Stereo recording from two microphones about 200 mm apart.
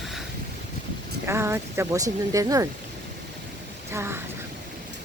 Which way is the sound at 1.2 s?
15° right (ahead or behind).